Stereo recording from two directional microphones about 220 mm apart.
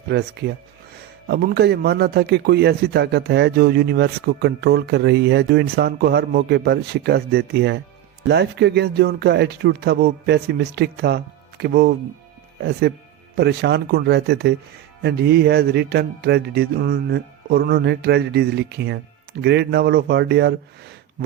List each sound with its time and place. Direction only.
0.1 s a man's voice: 50° right (ahead or behind)
13.3 s a man's voice: 50° right (ahead or behind)